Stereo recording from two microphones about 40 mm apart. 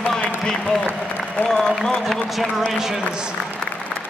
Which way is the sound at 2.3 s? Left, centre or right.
Centre.